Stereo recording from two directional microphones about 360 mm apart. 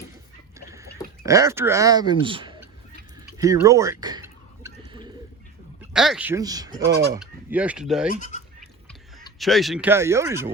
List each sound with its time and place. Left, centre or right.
0.7 s speech: centre
3.3 s a sound: centre
5.9 s speech: centre
8.2 s speech: centre
8.6 s a sound: centre
9.4 s speech: centre